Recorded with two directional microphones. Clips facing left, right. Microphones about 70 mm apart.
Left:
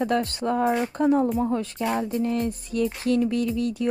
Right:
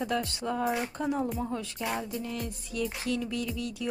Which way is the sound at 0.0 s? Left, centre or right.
Left.